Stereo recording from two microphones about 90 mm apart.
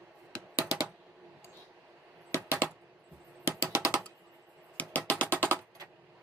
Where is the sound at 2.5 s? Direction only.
25° right (ahead or behind).